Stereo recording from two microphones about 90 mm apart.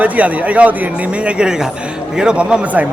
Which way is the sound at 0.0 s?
15° right (ahead or behind).